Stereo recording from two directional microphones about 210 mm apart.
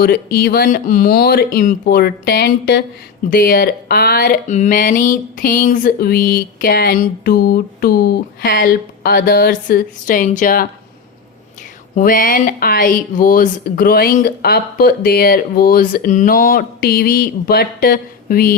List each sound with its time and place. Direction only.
0.0 s speech: 50° left (ahead or behind)
11.9 s speech: 40° left (ahead or behind)